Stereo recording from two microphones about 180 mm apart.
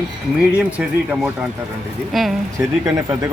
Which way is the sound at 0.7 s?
10° right (ahead or behind).